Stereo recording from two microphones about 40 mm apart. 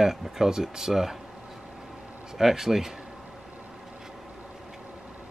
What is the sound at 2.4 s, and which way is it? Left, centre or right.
Speech, centre.